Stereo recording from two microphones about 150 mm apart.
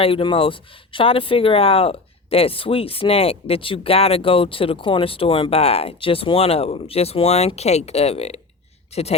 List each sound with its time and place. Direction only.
0.0 s speech: 35° left (ahead or behind)